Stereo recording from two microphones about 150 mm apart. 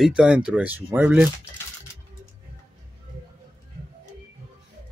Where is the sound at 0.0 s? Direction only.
5° right (ahead or behind).